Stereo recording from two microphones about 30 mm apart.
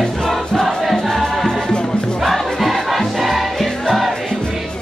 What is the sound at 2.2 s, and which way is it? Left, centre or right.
Crowd, centre.